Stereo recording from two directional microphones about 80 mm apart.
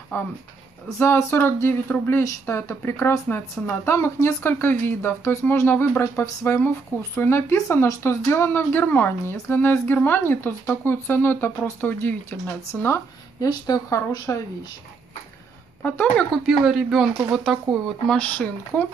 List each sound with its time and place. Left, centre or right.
0.1 s speech: left
13.4 s speech: left
15.8 s speech: centre
16.4 s speech: centre
18.0 s speech: centre